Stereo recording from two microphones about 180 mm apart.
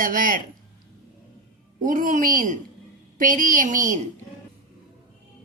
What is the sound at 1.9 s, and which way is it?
A woman's voice, 50° right (ahead or behind).